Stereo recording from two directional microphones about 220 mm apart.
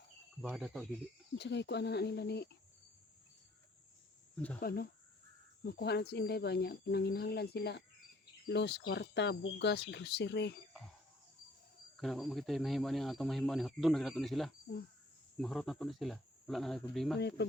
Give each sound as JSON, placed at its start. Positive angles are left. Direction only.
{"t": 0.4, "sound": "speech", "side_deg": 0}
{"t": 1.4, "sound": "speech", "side_deg": 50}
{"t": 4.6, "sound": "speech", "side_deg": 45}
{"t": 11.9, "sound": "speech", "side_deg": 0}
{"t": 17.2, "sound": "speech", "side_deg": 50}